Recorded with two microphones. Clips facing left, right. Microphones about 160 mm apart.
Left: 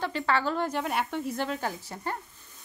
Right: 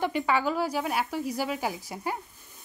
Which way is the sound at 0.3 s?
10° right (ahead or behind).